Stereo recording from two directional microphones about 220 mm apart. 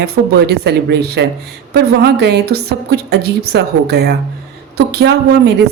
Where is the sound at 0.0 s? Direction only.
50° right (ahead or behind).